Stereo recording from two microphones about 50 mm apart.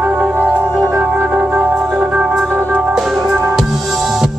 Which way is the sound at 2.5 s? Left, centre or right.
Right.